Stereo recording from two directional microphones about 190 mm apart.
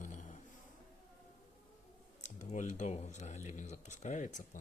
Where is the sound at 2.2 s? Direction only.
40° left (ahead or behind).